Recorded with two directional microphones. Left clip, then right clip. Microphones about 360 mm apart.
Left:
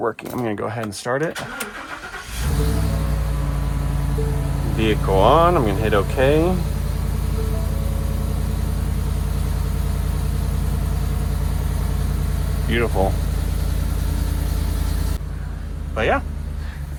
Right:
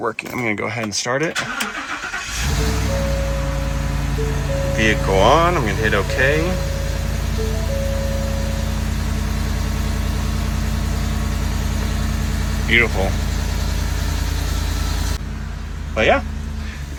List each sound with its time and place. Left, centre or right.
0.0 s speech: centre
4.8 s speech: centre
12.7 s speech: centre
16.0 s speech: centre